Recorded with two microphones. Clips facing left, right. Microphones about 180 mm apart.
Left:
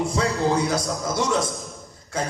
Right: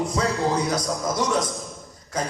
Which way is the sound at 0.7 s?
25° left (ahead or behind).